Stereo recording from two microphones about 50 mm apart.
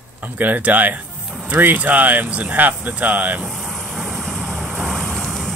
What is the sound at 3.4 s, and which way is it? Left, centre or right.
Vehicle, centre.